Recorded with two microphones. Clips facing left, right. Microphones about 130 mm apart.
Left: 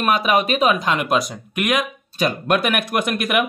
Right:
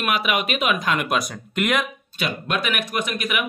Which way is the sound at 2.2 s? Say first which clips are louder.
Left 6 dB; 50° left (ahead or behind).